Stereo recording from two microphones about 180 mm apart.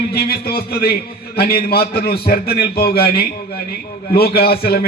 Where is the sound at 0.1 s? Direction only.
60° left (ahead or behind).